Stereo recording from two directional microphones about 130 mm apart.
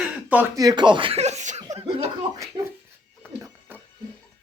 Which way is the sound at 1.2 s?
60° right (ahead or behind).